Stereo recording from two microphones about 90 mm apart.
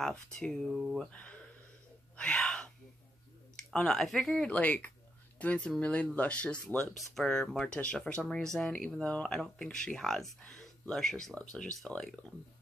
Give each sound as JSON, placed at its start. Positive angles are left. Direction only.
{"t": 0.0, "sound": "speech", "side_deg": 5}
{"t": 0.7, "sound": "speech", "side_deg": -5}
{"t": 0.9, "sound": "speech", "side_deg": 15}
{"t": 2.1, "sound": "a sound", "side_deg": 10}
{"t": 3.7, "sound": "speech", "side_deg": 10}
{"t": 4.5, "sound": "speech", "side_deg": 15}